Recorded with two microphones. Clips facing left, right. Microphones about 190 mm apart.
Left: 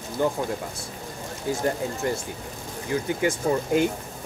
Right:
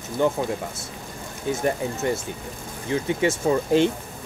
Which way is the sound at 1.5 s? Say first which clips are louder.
Right 2 dB; 20° right (ahead or behind).